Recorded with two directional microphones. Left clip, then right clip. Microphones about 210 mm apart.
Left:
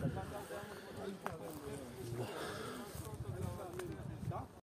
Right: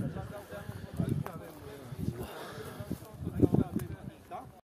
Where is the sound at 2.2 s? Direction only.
5° left (ahead or behind).